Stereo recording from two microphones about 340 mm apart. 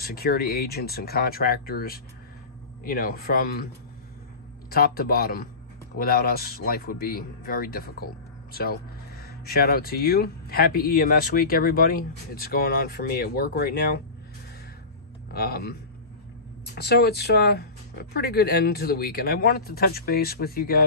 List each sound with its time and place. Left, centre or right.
0.0 s a man's voice: left
4.6 s a man's voice: left
15.3 s a man's voice: left